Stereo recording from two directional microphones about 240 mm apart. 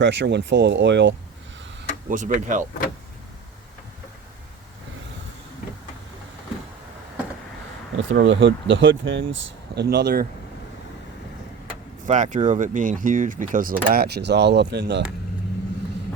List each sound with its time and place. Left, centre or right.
0.0 s speech: right
2.0 s speech: right
7.9 s speech: right
12.0 s speech: right